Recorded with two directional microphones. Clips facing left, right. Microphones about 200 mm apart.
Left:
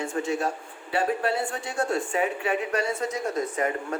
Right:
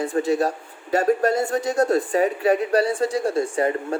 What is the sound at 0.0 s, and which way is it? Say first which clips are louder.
A man's voice: right 6 dB; 35° right (ahead or behind).